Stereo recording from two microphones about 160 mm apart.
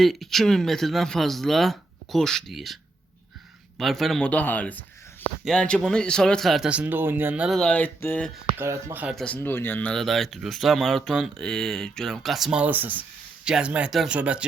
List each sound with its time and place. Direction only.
0.0 s speech: centre (ahead or behind)
3.8 s speech: centre (ahead or behind)
8.5 s speech: 15° right (ahead or behind)
9.1 s speech: 10° left (ahead or behind)